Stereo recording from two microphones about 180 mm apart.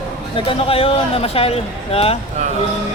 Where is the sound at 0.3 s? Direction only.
30° left (ahead or behind).